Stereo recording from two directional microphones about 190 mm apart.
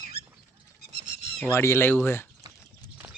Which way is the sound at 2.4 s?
20° right (ahead or behind).